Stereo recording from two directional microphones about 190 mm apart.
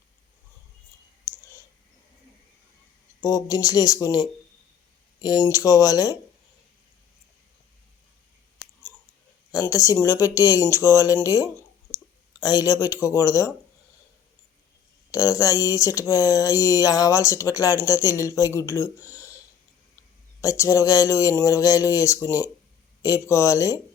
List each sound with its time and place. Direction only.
3.2 s speech: 20° left (ahead or behind)
5.5 s speech: 20° left (ahead or behind)
9.5 s speech: 20° left (ahead or behind)
15.1 s speech: 20° left (ahead or behind)
20.4 s speech: 15° left (ahead or behind)